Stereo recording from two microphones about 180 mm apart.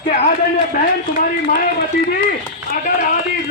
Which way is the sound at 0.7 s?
50° left (ahead or behind).